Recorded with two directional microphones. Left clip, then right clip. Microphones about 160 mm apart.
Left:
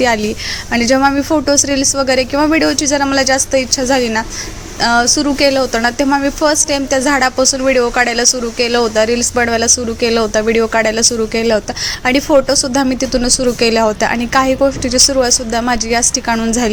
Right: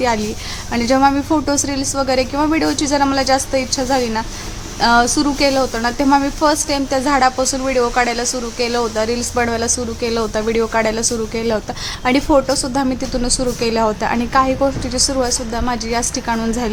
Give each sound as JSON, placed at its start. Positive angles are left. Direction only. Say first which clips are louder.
{"t": 0.7, "sound": "a woman's voice", "louder": "left 2 dB", "side_deg": 15}